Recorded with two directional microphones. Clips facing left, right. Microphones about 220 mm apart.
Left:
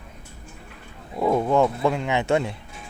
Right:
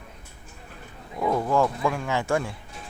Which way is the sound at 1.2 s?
25° left (ahead or behind).